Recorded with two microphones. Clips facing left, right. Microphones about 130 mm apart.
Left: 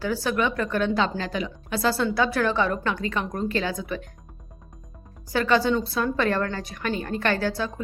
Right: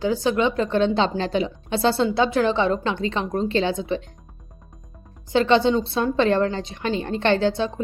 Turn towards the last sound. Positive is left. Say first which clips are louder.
# right 5 dB
turn(degrees=-25)  # may be behind; listen again after turning